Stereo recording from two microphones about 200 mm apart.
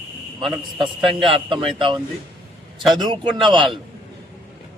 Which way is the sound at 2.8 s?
Centre (ahead or behind).